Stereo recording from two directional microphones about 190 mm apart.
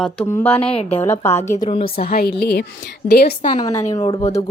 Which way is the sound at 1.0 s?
15° left (ahead or behind).